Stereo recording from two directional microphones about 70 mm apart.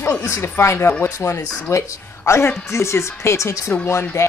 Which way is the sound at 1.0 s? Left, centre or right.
Left.